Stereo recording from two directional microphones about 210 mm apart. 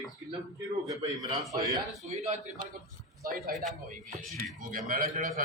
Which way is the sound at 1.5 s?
15° right (ahead or behind).